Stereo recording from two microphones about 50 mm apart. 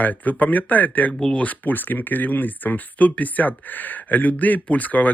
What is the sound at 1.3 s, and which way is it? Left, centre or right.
Speech, left.